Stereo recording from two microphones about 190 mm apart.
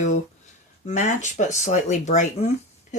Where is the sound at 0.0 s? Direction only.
40° left (ahead or behind).